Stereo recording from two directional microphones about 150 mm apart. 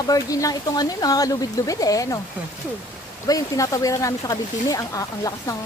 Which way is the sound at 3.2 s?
25° left (ahead or behind).